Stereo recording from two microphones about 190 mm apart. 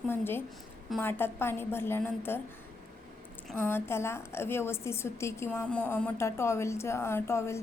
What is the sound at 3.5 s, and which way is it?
A woman's voice, 10° left (ahead or behind).